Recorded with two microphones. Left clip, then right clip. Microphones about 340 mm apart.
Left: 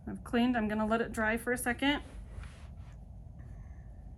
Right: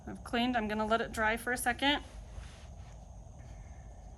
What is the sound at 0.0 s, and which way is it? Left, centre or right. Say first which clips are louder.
Speech: left 1 dB; right.